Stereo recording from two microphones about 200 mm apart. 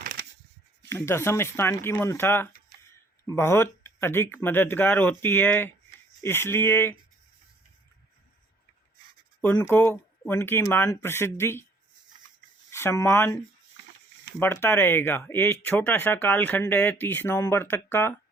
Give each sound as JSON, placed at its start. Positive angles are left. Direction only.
{"t": 0.0, "sound": "a sound", "side_deg": -50}
{"t": 0.9, "sound": "speech", "side_deg": 10}
{"t": 9.4, "sound": "speech", "side_deg": 10}
{"t": 12.7, "sound": "speech", "side_deg": 15}